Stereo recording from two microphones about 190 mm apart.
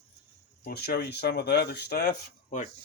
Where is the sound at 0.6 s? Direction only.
55° left (ahead or behind).